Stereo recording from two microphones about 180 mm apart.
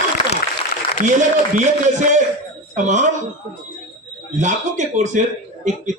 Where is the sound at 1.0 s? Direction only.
40° right (ahead or behind).